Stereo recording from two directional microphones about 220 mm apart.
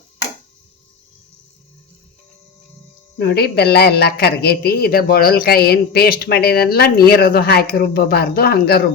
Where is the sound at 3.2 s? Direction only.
45° left (ahead or behind).